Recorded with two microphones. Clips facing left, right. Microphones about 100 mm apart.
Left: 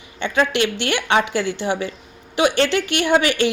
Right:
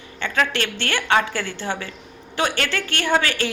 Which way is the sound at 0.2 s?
20° left (ahead or behind).